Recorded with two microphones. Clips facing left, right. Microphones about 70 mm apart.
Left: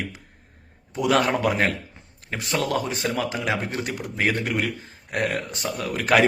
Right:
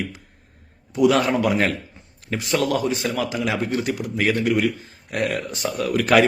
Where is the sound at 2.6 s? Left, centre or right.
Left.